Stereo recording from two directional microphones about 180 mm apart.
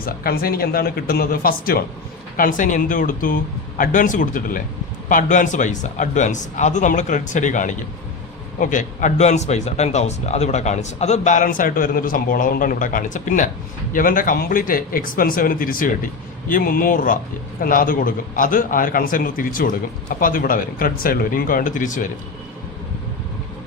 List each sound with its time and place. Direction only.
0.0 s speech: 55° left (ahead or behind)